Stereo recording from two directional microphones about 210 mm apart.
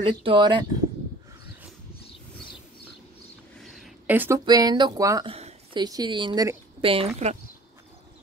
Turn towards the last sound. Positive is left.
turn(degrees=-30)  # may be behind; listen again after turning